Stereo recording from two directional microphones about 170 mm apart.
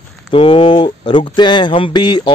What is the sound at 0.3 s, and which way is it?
Speech, 35° left (ahead or behind).